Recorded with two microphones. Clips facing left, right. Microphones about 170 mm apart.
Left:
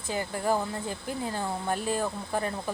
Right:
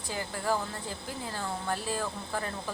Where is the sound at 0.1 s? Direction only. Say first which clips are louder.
Left 4 dB; 20° left (ahead or behind).